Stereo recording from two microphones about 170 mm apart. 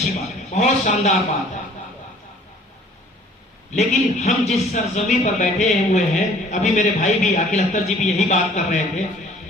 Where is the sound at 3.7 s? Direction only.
40° left (ahead or behind).